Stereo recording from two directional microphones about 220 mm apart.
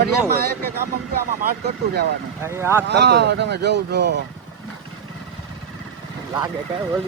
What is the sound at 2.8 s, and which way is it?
Speech, 50° right (ahead or behind).